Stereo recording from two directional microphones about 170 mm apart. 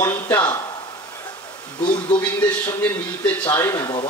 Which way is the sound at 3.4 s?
15° left (ahead or behind).